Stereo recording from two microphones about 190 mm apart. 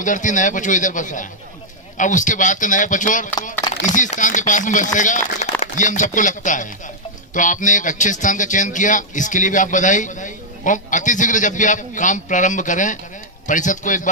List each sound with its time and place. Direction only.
0.0 s speech: 40° left (ahead or behind)